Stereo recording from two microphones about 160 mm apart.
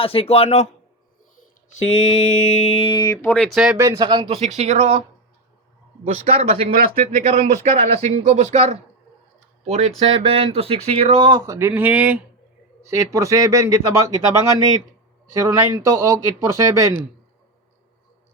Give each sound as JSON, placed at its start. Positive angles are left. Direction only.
{"t": 0.0, "sound": "mantra", "side_deg": 35}
{"t": 2.0, "sound": "mantra", "side_deg": 50}
{"t": 3.3, "sound": "speech", "side_deg": 0}
{"t": 3.8, "sound": "speech", "side_deg": -20}
{"t": 6.2, "sound": "speech", "side_deg": -40}
{"t": 15.3, "sound": "speech", "side_deg": -20}